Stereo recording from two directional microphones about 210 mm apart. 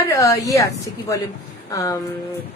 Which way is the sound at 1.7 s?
15° left (ahead or behind).